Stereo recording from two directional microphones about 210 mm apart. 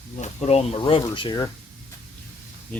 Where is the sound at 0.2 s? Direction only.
30° left (ahead or behind).